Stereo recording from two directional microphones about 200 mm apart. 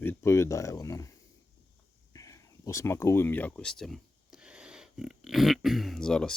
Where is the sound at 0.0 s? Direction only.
10° left (ahead or behind).